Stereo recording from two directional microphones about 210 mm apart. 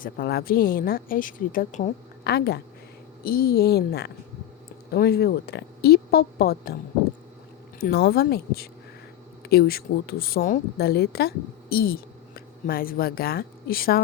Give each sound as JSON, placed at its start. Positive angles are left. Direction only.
{"t": 0.0, "sound": "speech", "side_deg": 45}
{"t": 2.2, "sound": "speech", "side_deg": 50}
{"t": 7.8, "sound": "speech", "side_deg": 50}